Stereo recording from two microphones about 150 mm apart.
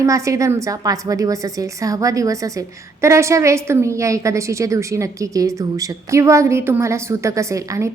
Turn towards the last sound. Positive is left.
turn(degrees=-20)  # may be behind; listen again after turning